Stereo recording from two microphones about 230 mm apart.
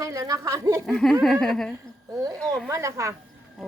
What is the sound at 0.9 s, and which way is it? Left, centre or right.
Speech, centre.